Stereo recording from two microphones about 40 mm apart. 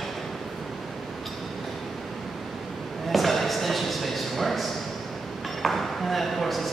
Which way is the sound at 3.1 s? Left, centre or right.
Centre.